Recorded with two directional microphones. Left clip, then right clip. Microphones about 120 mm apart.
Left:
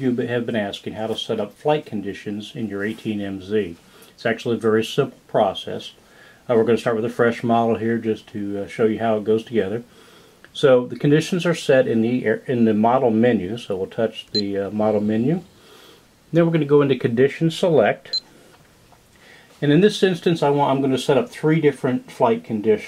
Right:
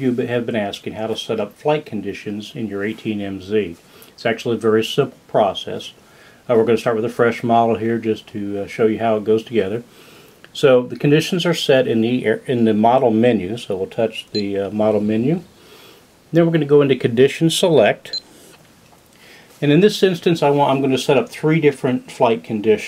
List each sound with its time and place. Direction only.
0.0 s speech: centre (ahead or behind)
17.3 s speech: 35° right (ahead or behind)
19.6 s speech: 5° right (ahead or behind)